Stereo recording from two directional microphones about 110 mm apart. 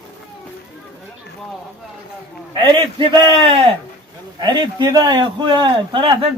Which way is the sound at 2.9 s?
45° right (ahead or behind).